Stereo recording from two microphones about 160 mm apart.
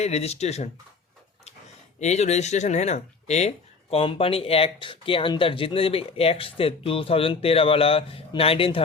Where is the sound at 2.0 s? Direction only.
45° left (ahead or behind).